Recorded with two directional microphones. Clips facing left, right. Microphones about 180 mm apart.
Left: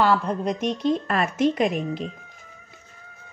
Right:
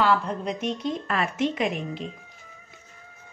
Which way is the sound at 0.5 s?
40° left (ahead or behind).